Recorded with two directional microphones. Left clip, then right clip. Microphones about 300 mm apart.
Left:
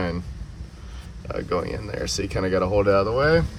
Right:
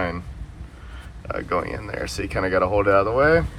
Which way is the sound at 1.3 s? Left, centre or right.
Centre.